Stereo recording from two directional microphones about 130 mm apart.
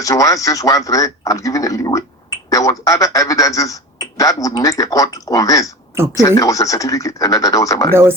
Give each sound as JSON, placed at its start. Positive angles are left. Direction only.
{"t": 0.0, "sound": "a man's voice", "side_deg": 25}